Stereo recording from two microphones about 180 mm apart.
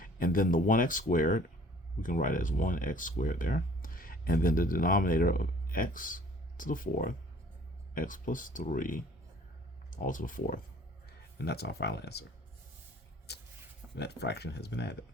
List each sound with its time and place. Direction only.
0.0 s speech: 50° left (ahead or behind)
11.3 s speech: 65° left (ahead or behind)
13.3 s a sound: 65° left (ahead or behind)
13.9 s speech: 70° left (ahead or behind)